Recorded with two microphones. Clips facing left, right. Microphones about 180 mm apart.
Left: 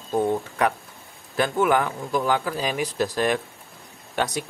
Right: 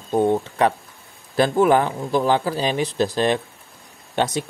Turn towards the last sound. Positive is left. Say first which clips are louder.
# right 4 dB
turn(degrees=-25)  # may be behind; listen again after turning